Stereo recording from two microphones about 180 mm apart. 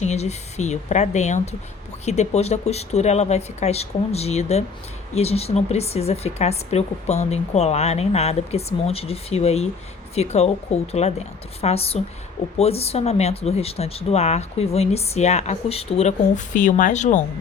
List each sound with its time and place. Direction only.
0.0 s speech: 40° left (ahead or behind)